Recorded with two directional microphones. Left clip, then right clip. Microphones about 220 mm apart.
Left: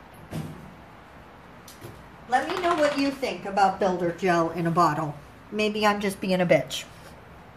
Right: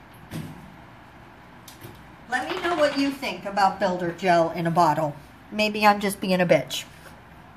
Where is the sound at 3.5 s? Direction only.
25° right (ahead or behind).